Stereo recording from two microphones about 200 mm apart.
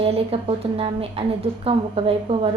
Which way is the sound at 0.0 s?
30° right (ahead or behind).